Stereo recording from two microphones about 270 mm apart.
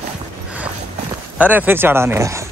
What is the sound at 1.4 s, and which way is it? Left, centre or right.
Speech, centre.